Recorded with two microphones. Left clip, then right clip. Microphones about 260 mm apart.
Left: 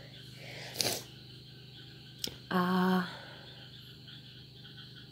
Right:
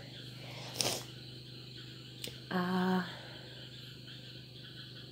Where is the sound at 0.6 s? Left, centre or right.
Centre.